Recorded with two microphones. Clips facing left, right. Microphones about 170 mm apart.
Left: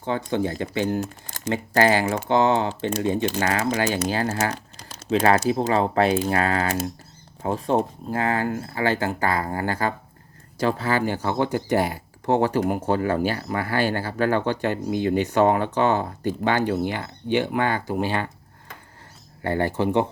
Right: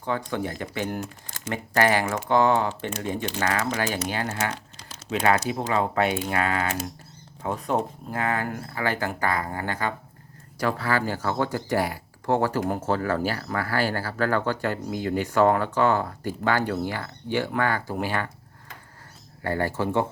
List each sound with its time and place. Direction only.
0.0 s speech: 25° left (ahead or behind)
19.4 s speech: 25° left (ahead or behind)